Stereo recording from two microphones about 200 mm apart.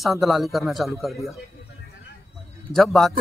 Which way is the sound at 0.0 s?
Centre (ahead or behind).